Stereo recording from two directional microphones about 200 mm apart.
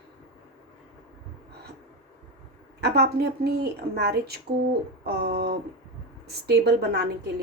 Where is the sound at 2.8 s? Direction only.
55° right (ahead or behind).